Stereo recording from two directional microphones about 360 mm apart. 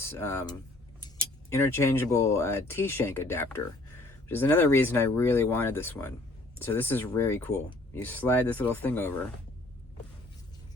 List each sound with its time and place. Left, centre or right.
0.1 s speech: centre